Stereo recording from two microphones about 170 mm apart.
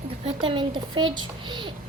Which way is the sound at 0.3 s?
30° right (ahead or behind).